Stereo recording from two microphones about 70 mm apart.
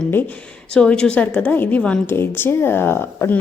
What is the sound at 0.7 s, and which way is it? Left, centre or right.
A woman's voice, centre.